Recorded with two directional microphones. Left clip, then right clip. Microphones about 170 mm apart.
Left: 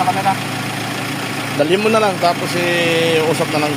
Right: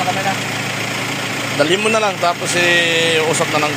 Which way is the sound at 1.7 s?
20° left (ahead or behind).